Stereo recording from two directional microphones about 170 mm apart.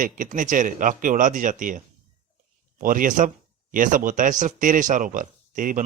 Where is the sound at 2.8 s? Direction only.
50° right (ahead or behind).